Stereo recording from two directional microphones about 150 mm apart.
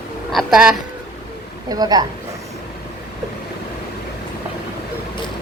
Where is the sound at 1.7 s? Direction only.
25° right (ahead or behind).